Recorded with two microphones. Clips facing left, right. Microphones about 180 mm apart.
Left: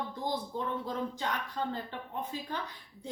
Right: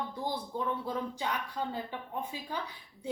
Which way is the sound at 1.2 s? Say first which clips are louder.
Even; 10° right (ahead or behind).